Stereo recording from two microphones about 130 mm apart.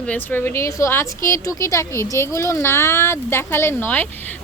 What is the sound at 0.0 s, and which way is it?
A woman's voice, 10° left (ahead or behind).